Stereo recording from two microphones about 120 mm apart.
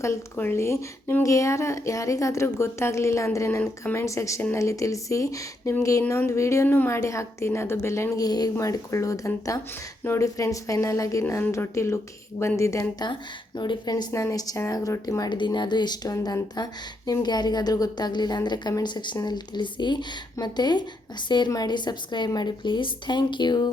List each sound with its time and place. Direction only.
0.0 s a woman's voice: 20° left (ahead or behind)
13.6 s a woman's voice: 35° left (ahead or behind)